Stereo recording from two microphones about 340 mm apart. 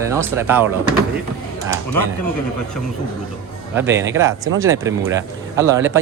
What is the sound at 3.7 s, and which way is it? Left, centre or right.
Speech, centre.